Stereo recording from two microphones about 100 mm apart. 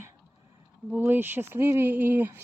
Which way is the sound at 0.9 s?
20° right (ahead or behind).